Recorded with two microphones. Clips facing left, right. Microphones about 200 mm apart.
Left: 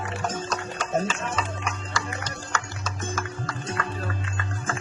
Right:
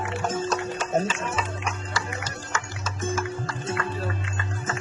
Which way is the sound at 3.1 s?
25° right (ahead or behind).